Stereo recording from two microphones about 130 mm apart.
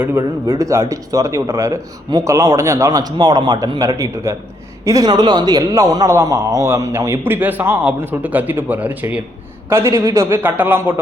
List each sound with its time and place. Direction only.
0.0 s speech: 20° right (ahead or behind)